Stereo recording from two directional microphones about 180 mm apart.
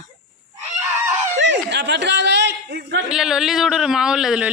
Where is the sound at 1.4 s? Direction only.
80° right.